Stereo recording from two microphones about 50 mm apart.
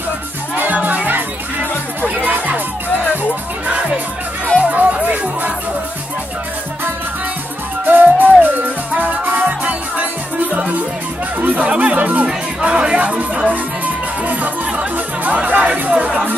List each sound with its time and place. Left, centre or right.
0.6 s music: right
2.2 s music: right
3.6 s music: right
7.8 s music: right
12.3 s music: right